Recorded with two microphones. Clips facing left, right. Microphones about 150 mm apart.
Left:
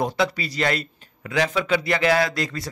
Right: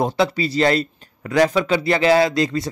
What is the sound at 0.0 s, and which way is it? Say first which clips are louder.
Speech: right 4 dB; 30° right (ahead or behind).